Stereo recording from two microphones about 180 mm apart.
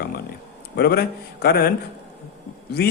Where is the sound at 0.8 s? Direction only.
60° left (ahead or behind).